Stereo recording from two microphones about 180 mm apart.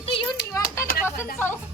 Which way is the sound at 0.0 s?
30° left (ahead or behind).